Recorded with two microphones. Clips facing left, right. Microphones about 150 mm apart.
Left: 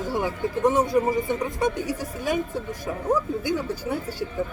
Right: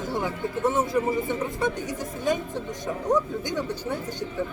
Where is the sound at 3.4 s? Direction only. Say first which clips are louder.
Left 3 dB; 10° left (ahead or behind).